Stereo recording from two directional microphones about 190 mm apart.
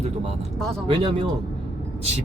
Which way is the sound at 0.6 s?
5° left (ahead or behind).